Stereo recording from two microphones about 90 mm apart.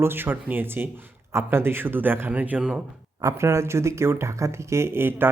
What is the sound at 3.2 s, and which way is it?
Speech, 35° right (ahead or behind).